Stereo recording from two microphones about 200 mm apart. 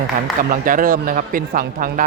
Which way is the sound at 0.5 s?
45° right (ahead or behind).